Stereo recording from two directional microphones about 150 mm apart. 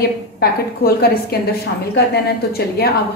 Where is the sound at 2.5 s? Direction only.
90° left.